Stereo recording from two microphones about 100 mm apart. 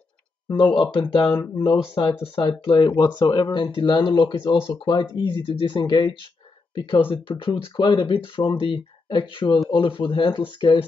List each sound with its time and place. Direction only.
0.6 s speech: 55° left (ahead or behind)